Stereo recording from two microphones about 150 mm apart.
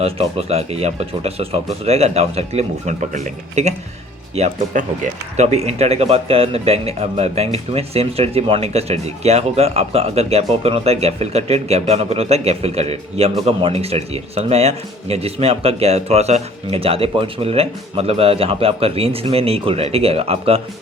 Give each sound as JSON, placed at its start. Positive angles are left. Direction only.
{"t": 0.0, "sound": "a man's voice", "side_deg": -40}